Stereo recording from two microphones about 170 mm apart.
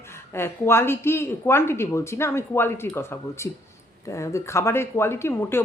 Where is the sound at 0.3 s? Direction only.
15° left (ahead or behind).